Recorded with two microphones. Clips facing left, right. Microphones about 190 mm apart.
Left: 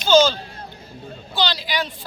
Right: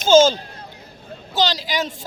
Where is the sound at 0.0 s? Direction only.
45° right (ahead or behind).